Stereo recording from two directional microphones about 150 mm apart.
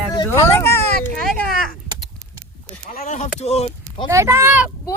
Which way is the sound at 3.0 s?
50° left (ahead or behind).